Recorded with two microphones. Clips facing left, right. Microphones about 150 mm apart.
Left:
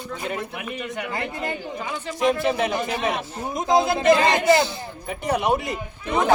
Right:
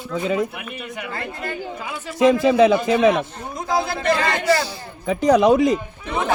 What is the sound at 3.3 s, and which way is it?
A man's voice, 15° left (ahead or behind).